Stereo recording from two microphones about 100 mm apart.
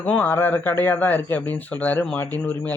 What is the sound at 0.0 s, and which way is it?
Speech, 15° left (ahead or behind).